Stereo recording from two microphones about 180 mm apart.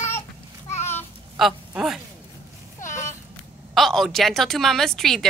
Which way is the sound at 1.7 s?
5° right (ahead or behind).